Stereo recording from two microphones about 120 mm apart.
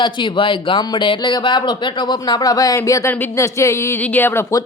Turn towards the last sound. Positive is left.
turn(degrees=20)  # may be behind; listen again after turning